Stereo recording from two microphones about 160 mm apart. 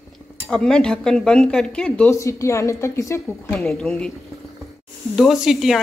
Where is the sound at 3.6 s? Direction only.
5° left (ahead or behind).